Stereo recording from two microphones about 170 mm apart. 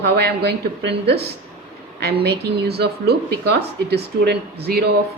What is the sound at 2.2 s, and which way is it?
Speech, 70° right (ahead or behind).